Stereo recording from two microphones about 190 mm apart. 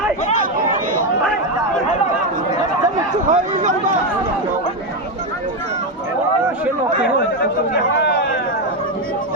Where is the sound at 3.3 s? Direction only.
40° right (ahead or behind).